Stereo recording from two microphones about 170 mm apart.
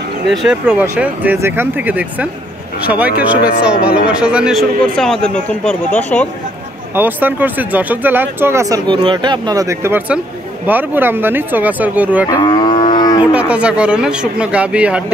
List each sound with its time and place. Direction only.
0.3 s speech: centre (ahead or behind)
7.0 s speech: 10° right (ahead or behind)
12.3 s cattle: 25° left (ahead or behind)
13.2 s speech: 5° right (ahead or behind)